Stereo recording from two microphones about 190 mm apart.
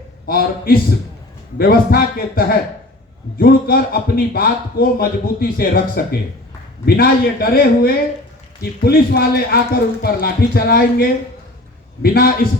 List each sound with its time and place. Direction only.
0.3 s a man's voice: 50° left (ahead or behind)